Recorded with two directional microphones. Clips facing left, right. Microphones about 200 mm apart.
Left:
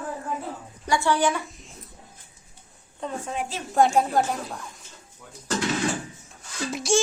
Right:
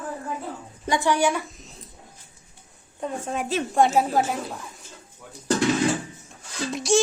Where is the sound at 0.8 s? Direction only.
15° right (ahead or behind).